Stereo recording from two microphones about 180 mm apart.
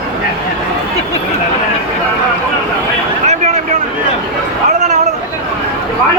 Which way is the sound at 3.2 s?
40° right (ahead or behind).